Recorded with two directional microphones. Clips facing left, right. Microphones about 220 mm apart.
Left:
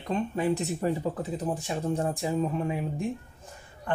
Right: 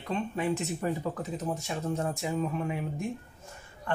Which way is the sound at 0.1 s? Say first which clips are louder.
Left 3 dB; 35° left (ahead or behind).